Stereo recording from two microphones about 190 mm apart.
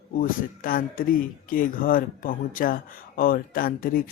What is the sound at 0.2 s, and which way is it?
Speech, 50° left (ahead or behind).